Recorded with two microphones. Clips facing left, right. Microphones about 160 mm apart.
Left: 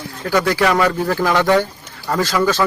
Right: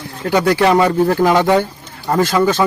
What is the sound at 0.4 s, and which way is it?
Speech, 25° right (ahead or behind).